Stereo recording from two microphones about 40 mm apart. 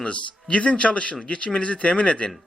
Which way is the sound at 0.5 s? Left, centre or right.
Left.